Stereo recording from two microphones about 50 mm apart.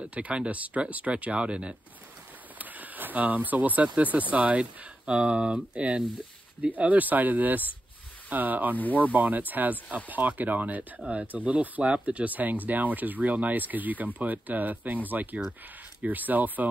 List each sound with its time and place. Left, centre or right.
0.0 s speech: right
2.6 s a sound: right
4.0 s speech: right
8.7 s speech: left
9.1 s speech: right